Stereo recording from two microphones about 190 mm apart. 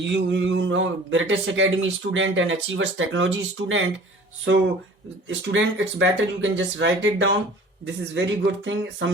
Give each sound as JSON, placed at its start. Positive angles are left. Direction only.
{"t": 0.0, "sound": "a man's voice", "side_deg": -70}